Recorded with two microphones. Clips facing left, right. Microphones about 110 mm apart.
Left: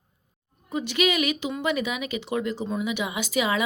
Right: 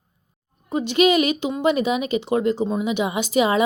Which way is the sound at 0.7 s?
30° right (ahead or behind).